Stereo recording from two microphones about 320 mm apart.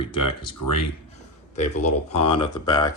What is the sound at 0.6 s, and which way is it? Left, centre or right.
Speech, left.